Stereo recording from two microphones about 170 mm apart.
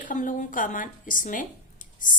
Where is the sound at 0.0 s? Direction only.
50° left (ahead or behind).